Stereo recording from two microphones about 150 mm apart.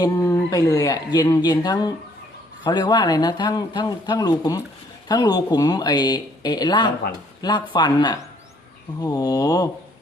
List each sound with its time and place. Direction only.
0.0 s speech: 20° left (ahead or behind)